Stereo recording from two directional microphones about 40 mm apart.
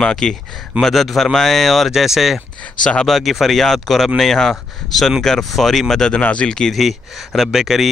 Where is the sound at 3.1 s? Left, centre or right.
Centre.